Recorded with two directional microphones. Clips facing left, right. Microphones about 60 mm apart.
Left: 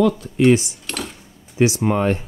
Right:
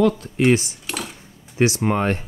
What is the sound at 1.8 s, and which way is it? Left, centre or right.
Speech, right.